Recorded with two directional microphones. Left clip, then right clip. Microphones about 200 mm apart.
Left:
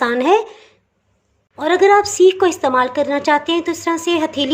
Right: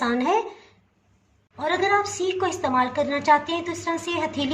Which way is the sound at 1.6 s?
50° left (ahead or behind).